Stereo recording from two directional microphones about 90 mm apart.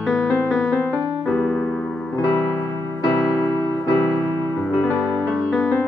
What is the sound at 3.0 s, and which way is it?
Keyboard, 40° left (ahead or behind).